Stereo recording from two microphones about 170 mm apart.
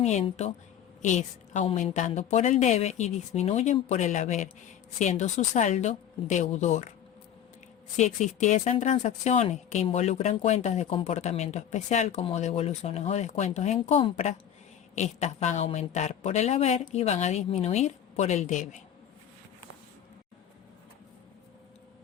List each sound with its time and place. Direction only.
0.0 s a woman's voice: 40° left (ahead or behind)
7.9 s a woman's voice: 45° left (ahead or behind)